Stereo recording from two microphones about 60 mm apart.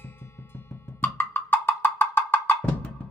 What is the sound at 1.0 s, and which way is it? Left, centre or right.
Music, left.